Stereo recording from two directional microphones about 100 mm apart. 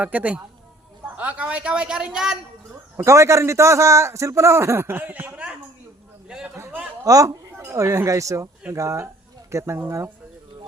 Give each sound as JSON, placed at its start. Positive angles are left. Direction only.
{"t": 0.0, "sound": "a man's voice", "side_deg": -15}
{"t": 3.0, "sound": "a man's voice", "side_deg": -30}
{"t": 6.2, "sound": "a sound", "side_deg": -5}
{"t": 7.0, "sound": "a man's voice", "side_deg": -35}